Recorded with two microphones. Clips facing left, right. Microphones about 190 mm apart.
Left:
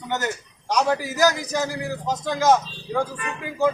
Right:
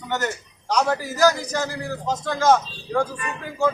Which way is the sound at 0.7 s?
15° left (ahead or behind).